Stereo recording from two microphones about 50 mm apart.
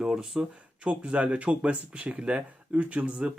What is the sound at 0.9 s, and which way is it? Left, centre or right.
Speech, right.